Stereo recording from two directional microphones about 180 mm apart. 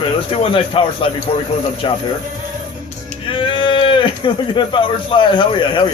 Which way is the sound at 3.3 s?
30° left (ahead or behind).